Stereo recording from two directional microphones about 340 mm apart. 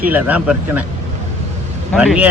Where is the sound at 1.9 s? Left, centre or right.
Centre.